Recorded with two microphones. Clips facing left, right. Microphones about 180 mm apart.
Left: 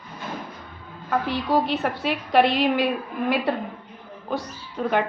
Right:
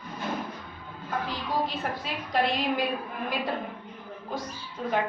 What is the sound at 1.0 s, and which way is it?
A woman's voice, 70° left (ahead or behind).